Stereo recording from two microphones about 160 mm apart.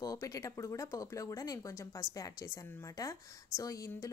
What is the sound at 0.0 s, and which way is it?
Speech, 20° left (ahead or behind).